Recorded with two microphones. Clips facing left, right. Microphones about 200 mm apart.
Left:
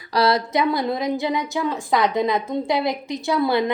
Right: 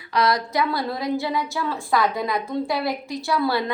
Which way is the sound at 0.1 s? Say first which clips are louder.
Left 3 dB; 30° left (ahead or behind).